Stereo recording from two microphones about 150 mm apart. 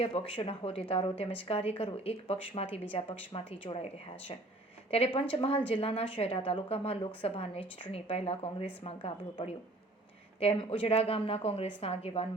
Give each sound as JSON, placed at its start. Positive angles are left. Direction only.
{"t": 0.0, "sound": "a woman's voice", "side_deg": 40}